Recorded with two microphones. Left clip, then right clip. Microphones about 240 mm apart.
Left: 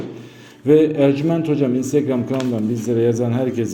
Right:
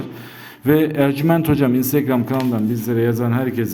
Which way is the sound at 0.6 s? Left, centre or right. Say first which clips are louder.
Left 3 dB; right.